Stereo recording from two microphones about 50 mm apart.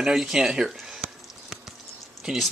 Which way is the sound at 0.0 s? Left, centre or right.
Centre.